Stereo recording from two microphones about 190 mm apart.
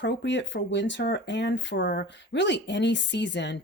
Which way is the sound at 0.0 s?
70° left (ahead or behind).